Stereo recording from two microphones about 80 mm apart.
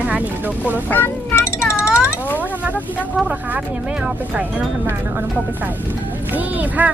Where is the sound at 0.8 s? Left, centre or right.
Left.